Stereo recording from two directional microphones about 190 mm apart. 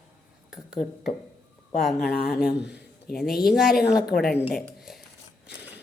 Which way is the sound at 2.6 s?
60° left (ahead or behind).